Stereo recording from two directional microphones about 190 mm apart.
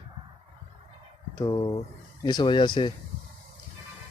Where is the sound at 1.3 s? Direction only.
20° left (ahead or behind).